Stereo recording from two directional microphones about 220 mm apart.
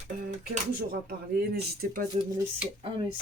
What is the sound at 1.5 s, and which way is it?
Speech, 45° right (ahead or behind).